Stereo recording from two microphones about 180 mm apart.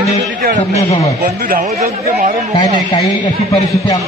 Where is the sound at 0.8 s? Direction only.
35° left (ahead or behind).